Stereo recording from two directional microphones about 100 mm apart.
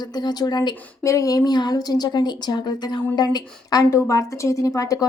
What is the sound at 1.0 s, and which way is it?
A woman's voice, 35° left (ahead or behind).